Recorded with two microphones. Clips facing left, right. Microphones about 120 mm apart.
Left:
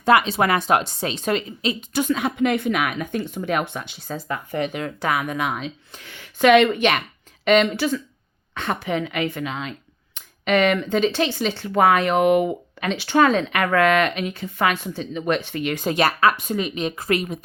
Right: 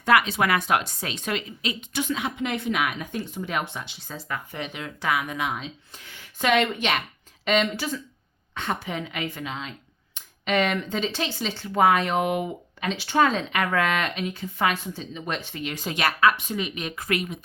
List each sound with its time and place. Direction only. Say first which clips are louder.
0.0 s a woman's voice: left 4 dB; 30° left (ahead or behind); by 16.0 s 55° left (ahead or behind)
16.0 s a woman's voice: left 2 dB; 35° left (ahead or behind)
16.7 s a woman's voice: left 5 dB; 30° left (ahead or behind)